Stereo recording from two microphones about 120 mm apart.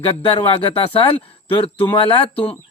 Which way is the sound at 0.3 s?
50° left (ahead or behind).